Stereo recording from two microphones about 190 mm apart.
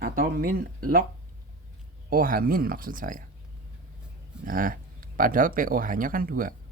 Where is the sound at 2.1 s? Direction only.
50° right (ahead or behind).